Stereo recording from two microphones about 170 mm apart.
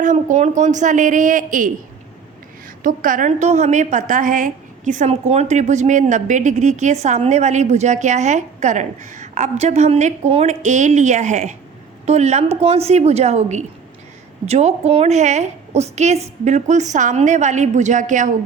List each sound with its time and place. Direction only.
0.0 s a woman's voice: 45° right (ahead or behind)
2.8 s a woman's voice: 50° right (ahead or behind)